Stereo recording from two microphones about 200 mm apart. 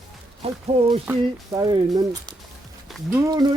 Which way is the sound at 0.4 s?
30° right (ahead or behind).